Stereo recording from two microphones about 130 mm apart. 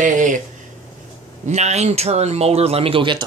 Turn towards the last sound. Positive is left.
turn(degrees=-40)  # may be behind; listen again after turning